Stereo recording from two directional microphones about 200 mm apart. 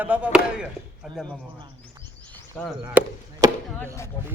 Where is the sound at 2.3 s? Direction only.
5° left (ahead or behind).